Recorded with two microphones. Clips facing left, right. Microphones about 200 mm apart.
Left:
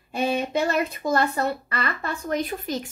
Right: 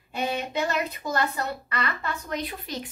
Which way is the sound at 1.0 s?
50° left (ahead or behind).